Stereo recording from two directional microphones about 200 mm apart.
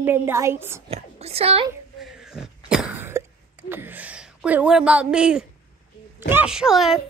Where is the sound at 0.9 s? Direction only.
30° right (ahead or behind).